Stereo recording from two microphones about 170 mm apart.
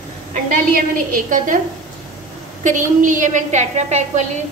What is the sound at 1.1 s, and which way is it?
Speech, 50° right (ahead or behind).